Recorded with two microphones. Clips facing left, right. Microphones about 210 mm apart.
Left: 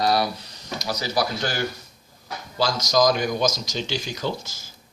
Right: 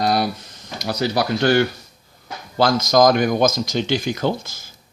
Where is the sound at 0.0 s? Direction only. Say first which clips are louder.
Right 2 dB; 50° right (ahead or behind).